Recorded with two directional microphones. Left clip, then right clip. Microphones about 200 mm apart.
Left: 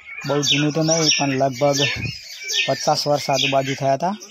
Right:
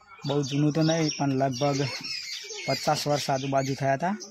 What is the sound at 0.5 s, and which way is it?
Speech, 10° left (ahead or behind).